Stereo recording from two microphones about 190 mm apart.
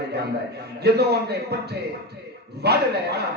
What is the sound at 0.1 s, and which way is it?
A man's voice, 60° right (ahead or behind).